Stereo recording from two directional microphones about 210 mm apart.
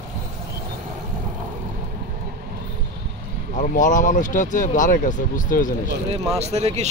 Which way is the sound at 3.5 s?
40° left (ahead or behind).